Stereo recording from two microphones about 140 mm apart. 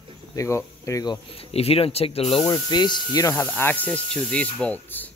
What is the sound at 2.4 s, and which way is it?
Speech, 30° left (ahead or behind).